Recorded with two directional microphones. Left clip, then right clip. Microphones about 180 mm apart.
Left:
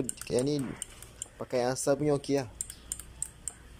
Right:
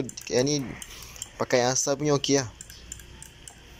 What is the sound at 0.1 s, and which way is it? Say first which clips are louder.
Speech: right 6 dB; 10° left (ahead or behind).